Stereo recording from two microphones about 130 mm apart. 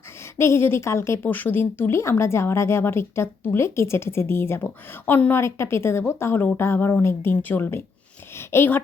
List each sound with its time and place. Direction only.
0.3 s a woman's voice: 20° left (ahead or behind)